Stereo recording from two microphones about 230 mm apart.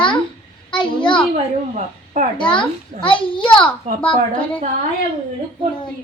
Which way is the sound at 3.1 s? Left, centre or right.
Left.